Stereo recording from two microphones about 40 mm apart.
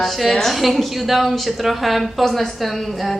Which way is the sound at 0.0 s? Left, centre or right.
Centre.